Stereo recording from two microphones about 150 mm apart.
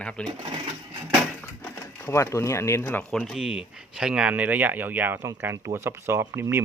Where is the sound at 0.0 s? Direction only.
5° left (ahead or behind).